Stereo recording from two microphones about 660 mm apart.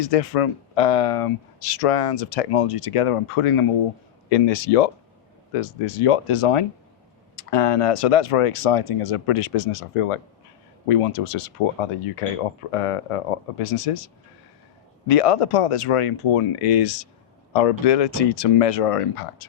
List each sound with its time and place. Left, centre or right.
0.0 s speech: left
4.3 s speech: left
5.5 s speech: left
15.0 s speech: left